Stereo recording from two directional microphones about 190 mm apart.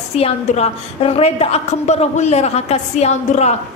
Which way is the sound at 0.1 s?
30° left (ahead or behind).